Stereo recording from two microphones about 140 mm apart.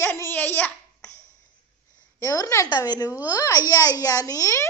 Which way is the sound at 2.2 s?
25° left (ahead or behind).